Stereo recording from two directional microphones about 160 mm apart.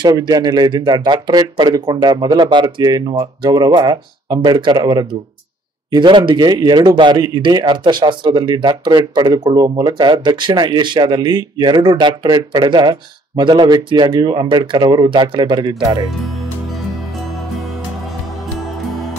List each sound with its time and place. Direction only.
0.0 s speech: 25° right (ahead or behind)